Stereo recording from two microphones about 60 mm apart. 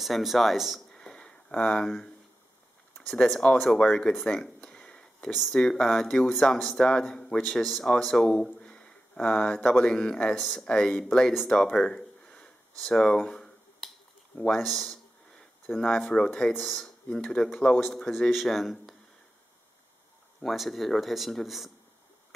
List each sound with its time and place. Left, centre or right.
0.0 s speech: centre
0.9 s a sound: centre
3.0 s speech: centre
4.6 s a sound: centre
5.5 s speech: centre
5.8 s speech: centre
6.0 s speech: centre
8.0 s a sound: centre
9.2 s speech: centre
12.8 s finger snapping: centre
14.3 s speech: centre
18.3 s speech: centre
20.3 s speech: centre